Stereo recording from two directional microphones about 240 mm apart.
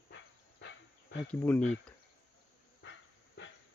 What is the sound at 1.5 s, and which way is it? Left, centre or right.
Speech, centre.